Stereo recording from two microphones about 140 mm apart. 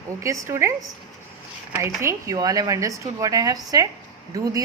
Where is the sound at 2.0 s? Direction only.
20° right (ahead or behind).